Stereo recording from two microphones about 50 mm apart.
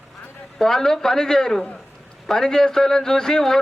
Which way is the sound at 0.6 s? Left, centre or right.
Centre.